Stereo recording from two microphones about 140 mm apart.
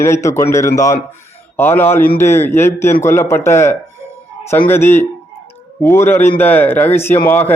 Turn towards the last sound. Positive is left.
turn(degrees=15)  # may be behind; listen again after turning